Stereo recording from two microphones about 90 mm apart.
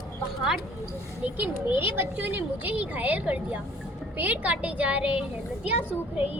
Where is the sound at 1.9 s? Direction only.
20° right (ahead or behind).